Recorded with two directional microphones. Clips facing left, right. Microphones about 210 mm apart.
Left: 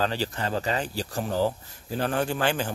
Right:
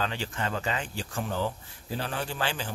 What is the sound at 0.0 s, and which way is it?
Speech, 35° left (ahead or behind).